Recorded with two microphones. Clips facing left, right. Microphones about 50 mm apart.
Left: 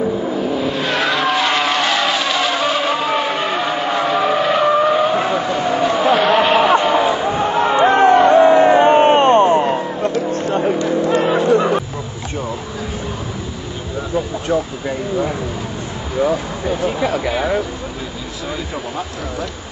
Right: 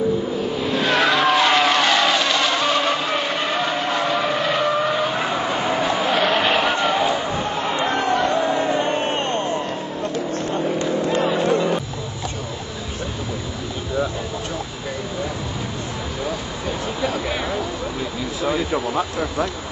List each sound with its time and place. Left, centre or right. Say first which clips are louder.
0.6 s vehicle: left 1 dB; centre
7.5 s music: left 11 dB; left
10.3 s vehicle: left 5 dB; left